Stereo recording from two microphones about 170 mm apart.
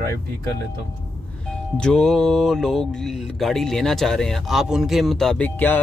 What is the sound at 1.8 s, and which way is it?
Speech, 5° left (ahead or behind).